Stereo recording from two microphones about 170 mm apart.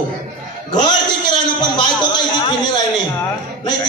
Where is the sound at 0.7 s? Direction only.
25° left (ahead or behind).